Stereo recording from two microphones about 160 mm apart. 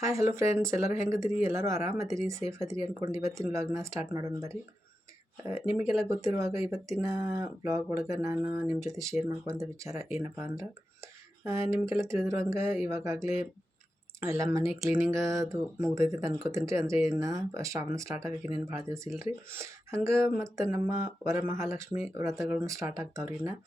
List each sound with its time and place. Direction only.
0.0 s speech: 20° right (ahead or behind)
5.4 s speech: 15° right (ahead or behind)
14.3 s speech: 15° right (ahead or behind)